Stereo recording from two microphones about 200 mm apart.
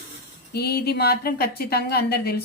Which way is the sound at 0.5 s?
55° left (ahead or behind).